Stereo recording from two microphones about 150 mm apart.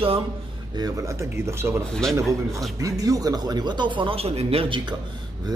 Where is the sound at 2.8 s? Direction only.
25° right (ahead or behind).